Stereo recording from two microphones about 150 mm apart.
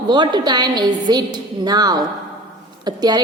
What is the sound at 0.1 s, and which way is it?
A woman's voice, 30° right (ahead or behind).